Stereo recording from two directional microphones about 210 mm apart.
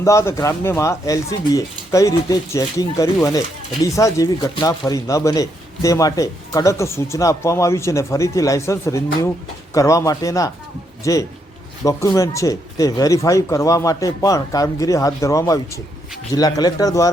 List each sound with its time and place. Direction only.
0.0 s a man's voice: 15° left (ahead or behind)